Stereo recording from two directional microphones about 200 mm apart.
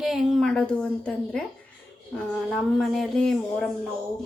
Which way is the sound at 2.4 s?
Centre (ahead or behind).